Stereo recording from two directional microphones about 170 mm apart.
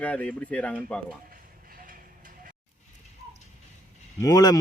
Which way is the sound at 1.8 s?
50° right (ahead or behind).